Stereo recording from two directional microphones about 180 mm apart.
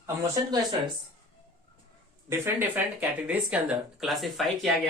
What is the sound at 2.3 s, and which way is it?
Speech, 10° right (ahead or behind).